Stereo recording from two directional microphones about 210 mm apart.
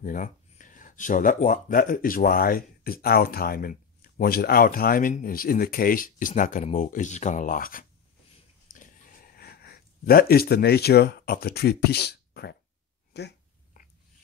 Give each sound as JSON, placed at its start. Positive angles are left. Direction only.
{"t": 0.0, "sound": "speech", "side_deg": 40}
{"t": 8.7, "sound": "a sound", "side_deg": 45}
{"t": 13.1, "sound": "speech", "side_deg": 50}